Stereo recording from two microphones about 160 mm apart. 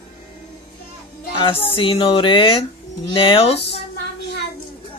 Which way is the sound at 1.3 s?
35° left (ahead or behind).